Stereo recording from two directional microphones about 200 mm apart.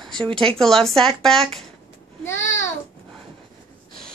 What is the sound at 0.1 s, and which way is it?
Speech, 25° right (ahead or behind).